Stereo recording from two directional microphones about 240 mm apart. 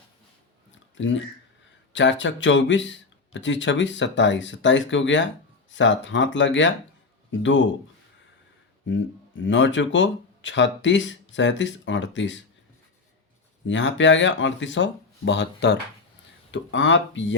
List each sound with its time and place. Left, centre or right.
0.9 s speech: left
9.4 s speech: left
13.7 s speech: left